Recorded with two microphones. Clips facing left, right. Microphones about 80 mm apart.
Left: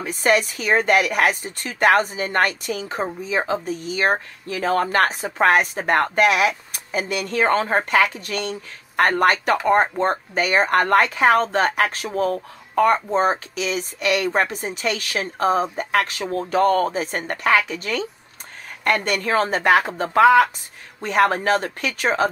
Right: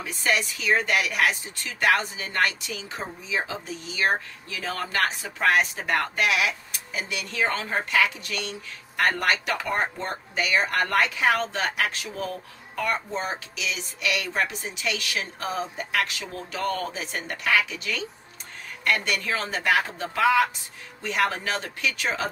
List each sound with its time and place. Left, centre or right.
0.0 s speech: left